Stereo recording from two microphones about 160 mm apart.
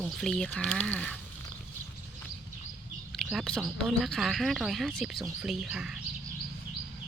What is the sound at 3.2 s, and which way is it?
Speech, centre (ahead or behind).